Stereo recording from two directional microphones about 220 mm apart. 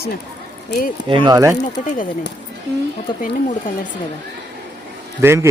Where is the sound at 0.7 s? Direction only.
40° left (ahead or behind).